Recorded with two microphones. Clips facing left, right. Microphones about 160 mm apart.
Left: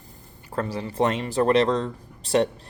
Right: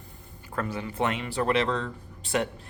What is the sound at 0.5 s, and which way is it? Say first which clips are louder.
Speech: left 4 dB; 30° left (ahead or behind).